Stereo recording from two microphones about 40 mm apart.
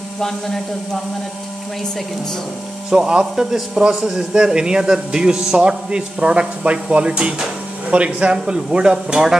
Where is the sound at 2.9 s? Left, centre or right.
Centre.